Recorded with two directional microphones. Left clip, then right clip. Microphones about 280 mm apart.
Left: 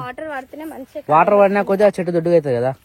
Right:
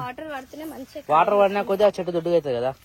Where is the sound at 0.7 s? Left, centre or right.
Left.